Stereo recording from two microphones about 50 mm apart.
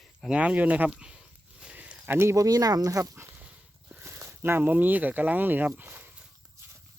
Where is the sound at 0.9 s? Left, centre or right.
Centre.